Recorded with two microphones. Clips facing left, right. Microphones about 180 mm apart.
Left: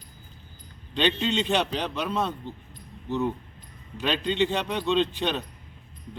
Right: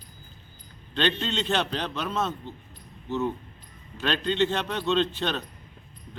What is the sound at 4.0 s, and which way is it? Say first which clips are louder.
A man's voice: even; 10° left (ahead or behind).